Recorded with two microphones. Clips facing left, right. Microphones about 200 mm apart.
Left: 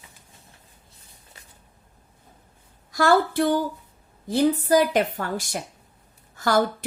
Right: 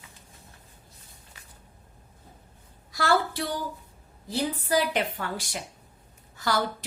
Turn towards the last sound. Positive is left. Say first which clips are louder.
# left 6 dB
turn(degrees=50)  # may be behind; listen again after turning